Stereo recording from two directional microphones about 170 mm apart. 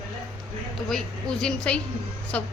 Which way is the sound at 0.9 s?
5° left (ahead or behind).